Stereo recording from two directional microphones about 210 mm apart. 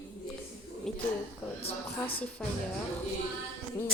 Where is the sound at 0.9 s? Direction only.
Centre (ahead or behind).